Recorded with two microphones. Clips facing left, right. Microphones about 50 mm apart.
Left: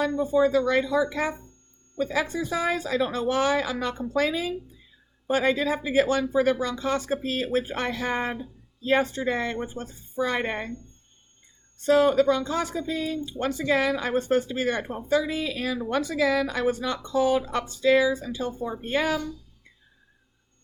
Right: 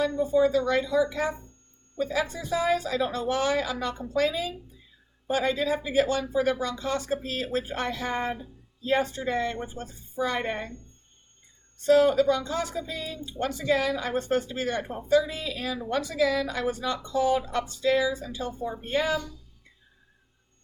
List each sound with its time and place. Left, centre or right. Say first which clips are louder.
0.0 s speech: left 1 dB; left
11.9 s speech: even; left
12.3 s speech: left 2 dB; left